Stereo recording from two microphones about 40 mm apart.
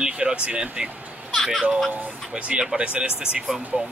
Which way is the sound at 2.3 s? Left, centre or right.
Right.